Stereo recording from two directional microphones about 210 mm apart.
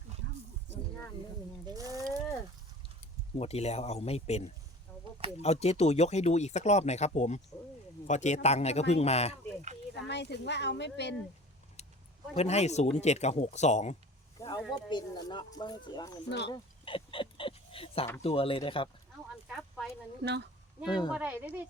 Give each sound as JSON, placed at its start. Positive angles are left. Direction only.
{"t": 1.6, "sound": "speech", "side_deg": -15}
{"t": 3.3, "sound": "speech", "side_deg": 30}
{"t": 9.9, "sound": "speech", "side_deg": 55}
{"t": 11.8, "sound": "keys jangling", "side_deg": 30}
{"t": 12.3, "sound": "speech", "side_deg": 30}
{"t": 14.3, "sound": "speech", "side_deg": 15}
{"t": 16.5, "sound": "a sound", "side_deg": 25}
{"t": 18.2, "sound": "speech", "side_deg": 25}
{"t": 19.5, "sound": "speech", "side_deg": 0}
{"t": 20.2, "sound": "a woman's voice", "side_deg": -55}
{"t": 21.1, "sound": "speech", "side_deg": -5}